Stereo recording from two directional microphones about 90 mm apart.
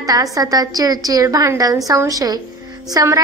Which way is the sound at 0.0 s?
40° right (ahead or behind).